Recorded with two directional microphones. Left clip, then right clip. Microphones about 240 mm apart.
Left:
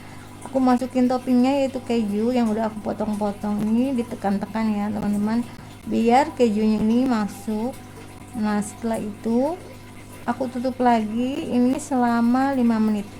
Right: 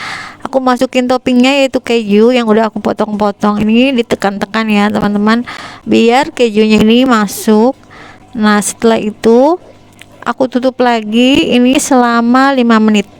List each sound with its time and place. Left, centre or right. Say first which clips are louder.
0.6 s speech: right 8 dB; right